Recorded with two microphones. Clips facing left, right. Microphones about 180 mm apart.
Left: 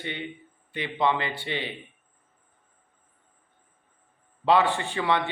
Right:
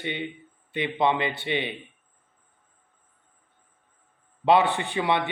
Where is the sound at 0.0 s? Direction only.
20° right (ahead or behind).